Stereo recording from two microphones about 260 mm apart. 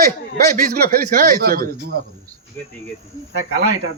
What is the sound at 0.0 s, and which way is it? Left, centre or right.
Speech, right.